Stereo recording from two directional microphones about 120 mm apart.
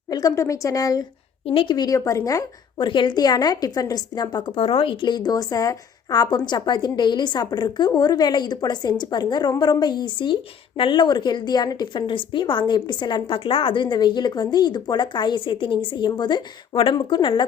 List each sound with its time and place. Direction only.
0.1 s speech: 30° left (ahead or behind)
1.5 s a woman's voice: 45° left (ahead or behind); by 2.4 s 30° left (ahead or behind)
2.7 s a woman's voice: 40° left (ahead or behind)